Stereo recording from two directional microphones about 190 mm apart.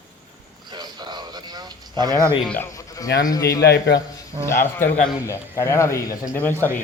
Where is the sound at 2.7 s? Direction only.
20° left (ahead or behind).